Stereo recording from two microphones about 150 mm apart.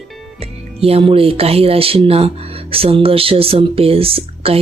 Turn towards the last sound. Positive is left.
turn(degrees=-40)  # may be behind; listen again after turning